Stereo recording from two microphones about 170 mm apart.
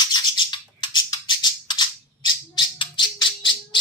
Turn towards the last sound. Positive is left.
turn(degrees=30)  # may be behind; listen again after turning